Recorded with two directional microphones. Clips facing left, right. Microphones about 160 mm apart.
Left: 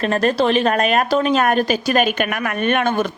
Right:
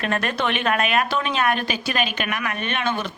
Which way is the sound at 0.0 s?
35° left (ahead or behind).